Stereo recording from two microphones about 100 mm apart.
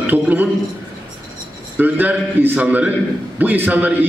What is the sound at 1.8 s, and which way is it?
A man's voice, 20° right (ahead or behind).